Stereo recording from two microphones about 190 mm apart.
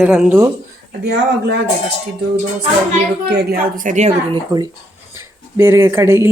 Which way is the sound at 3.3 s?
55° right (ahead or behind).